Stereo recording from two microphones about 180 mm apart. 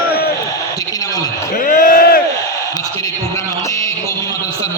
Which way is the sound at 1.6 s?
50° left (ahead or behind).